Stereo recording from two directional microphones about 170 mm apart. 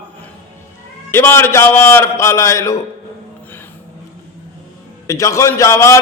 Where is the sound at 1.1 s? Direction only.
15° left (ahead or behind).